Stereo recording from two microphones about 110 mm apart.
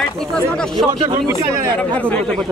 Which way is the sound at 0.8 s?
45° right (ahead or behind).